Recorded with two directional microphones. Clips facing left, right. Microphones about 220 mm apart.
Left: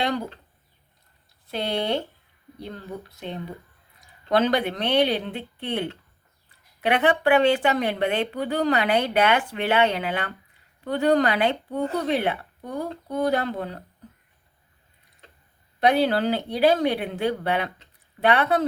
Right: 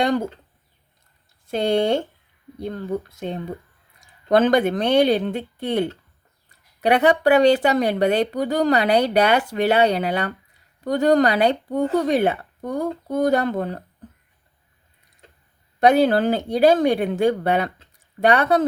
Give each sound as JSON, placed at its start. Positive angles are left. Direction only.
{"t": 0.0, "sound": "speech", "side_deg": -45}
{"t": 1.5, "sound": "speech", "side_deg": -45}
{"t": 15.8, "sound": "speech", "side_deg": -45}